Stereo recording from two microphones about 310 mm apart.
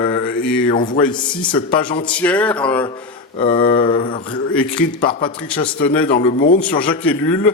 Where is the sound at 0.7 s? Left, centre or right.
Left.